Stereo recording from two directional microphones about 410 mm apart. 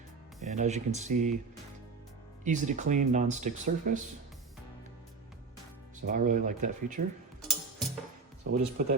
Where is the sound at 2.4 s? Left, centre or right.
Centre.